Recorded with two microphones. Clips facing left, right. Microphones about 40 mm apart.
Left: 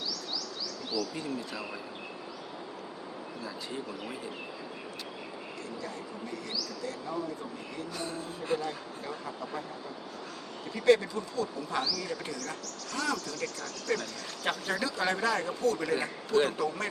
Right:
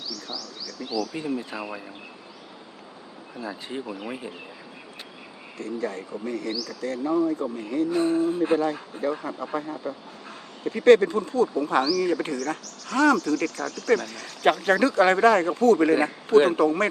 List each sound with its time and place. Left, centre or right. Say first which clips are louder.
0.1 s bird: right 2 dB; centre
1.1 s speech: right 6 dB; right
3.4 s a sound: right 7 dB; right
4.0 s speech: right 5 dB; right
5.5 s speech: right 12 dB; right
7.9 s a sound: right 16 dB; right
9.0 s speech: right 10 dB; right
13.3 s speech: right 11 dB; right
14.7 s speech: right 11 dB; right